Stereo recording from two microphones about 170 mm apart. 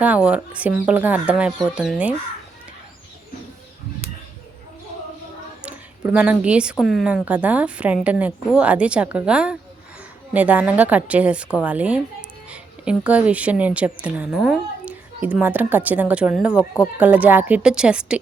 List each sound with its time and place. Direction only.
0.0 s a woman's voice: 10° right (ahead or behind)
5.6 s a woman's voice: 10° right (ahead or behind)